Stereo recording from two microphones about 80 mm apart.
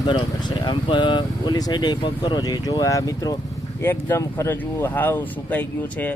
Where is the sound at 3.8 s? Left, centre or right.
Left.